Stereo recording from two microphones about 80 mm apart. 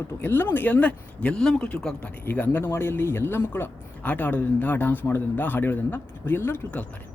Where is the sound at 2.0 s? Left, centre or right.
Centre.